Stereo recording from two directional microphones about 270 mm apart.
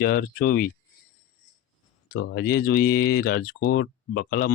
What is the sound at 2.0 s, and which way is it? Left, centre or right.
Speech, left.